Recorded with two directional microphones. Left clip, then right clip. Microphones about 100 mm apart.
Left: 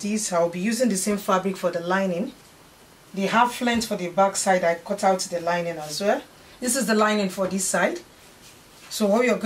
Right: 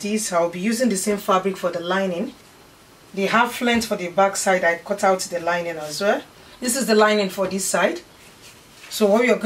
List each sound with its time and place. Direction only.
0.0 s speech: 20° left (ahead or behind)
3.2 s speech: 20° left (ahead or behind)
8.9 s speech: 20° left (ahead or behind)